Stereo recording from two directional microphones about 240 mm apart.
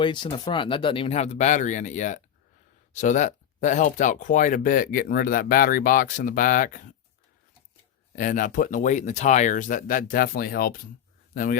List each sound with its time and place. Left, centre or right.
0.0 s speech: centre
8.1 s speech: left